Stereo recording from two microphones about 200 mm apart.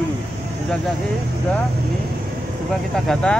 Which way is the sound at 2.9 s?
5° left (ahead or behind).